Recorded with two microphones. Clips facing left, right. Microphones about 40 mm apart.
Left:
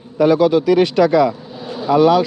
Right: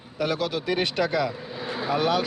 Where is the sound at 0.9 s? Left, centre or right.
Left.